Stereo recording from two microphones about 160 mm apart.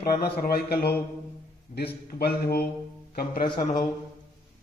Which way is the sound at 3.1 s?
65° left (ahead or behind).